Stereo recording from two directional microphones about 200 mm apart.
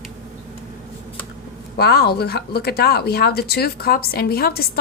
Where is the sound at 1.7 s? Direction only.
50° left (ahead or behind).